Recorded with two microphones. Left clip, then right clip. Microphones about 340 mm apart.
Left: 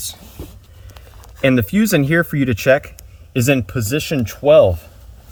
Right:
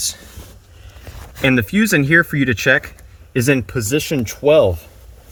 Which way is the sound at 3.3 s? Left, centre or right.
Right.